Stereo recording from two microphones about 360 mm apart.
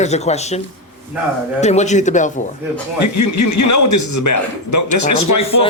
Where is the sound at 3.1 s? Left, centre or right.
Left.